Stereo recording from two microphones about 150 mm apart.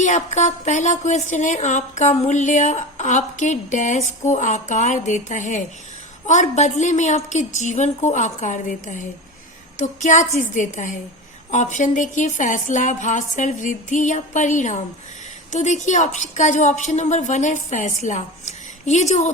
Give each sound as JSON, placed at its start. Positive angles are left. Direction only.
{"t": 0.0, "sound": "a woman's voice", "side_deg": 50}